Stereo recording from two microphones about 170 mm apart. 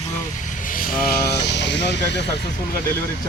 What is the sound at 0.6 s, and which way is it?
Vehicle, 55° left (ahead or behind).